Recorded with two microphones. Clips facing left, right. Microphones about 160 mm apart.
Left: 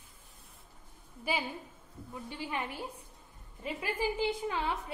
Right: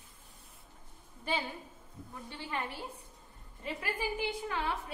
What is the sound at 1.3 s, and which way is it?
A woman's voice, 10° left (ahead or behind).